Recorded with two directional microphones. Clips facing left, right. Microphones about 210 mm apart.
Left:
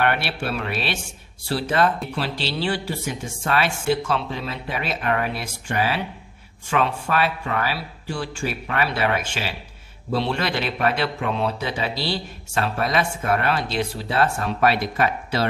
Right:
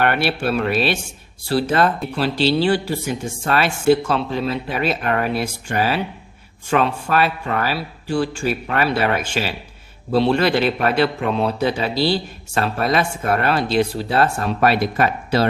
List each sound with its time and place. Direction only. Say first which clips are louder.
0.0 s speech: right 4 dB; 40° right (ahead or behind)